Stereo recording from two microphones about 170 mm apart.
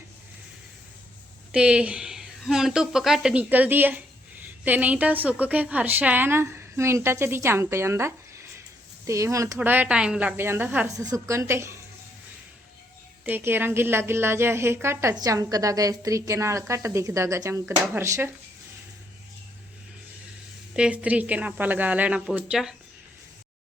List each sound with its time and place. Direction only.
1.5 s a woman's voice: 5° right (ahead or behind)
13.2 s a woman's voice: 10° right (ahead or behind)
20.7 s a woman's voice: 5° right (ahead or behind)